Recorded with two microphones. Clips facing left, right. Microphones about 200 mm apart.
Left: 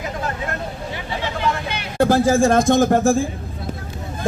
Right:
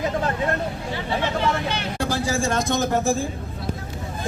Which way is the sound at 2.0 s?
55° left (ahead or behind).